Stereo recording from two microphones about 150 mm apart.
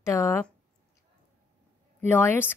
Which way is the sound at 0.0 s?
20° left (ahead or behind).